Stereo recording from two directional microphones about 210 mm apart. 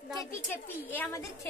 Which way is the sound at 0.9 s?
10° left (ahead or behind).